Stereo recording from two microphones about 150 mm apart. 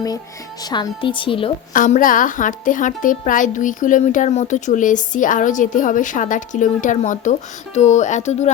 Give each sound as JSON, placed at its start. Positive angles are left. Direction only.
{"t": 0.6, "sound": "a woman's voice", "side_deg": 30}
{"t": 1.7, "sound": "a woman's voice", "side_deg": 60}